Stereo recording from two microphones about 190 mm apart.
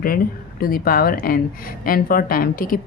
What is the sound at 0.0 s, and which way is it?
Speech, 50° left (ahead or behind).